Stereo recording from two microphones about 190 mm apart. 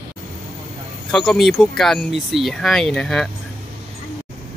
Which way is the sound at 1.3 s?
Centre (ahead or behind).